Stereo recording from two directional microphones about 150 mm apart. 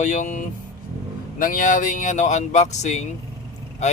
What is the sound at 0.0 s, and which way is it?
Speech, 55° left (ahead or behind).